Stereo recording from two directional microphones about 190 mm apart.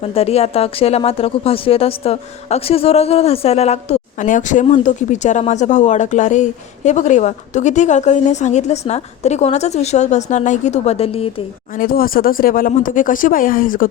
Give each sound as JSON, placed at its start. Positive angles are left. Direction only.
{"t": 0.0, "sound": "speech", "side_deg": 30}
{"t": 11.8, "sound": "speech", "side_deg": 50}